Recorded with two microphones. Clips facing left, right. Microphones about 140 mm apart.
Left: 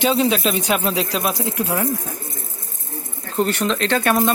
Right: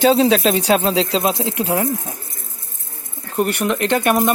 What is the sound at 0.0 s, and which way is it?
Speech, 35° right (ahead or behind).